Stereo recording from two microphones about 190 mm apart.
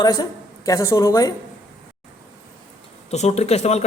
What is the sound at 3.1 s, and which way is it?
Speech, 35° left (ahead or behind).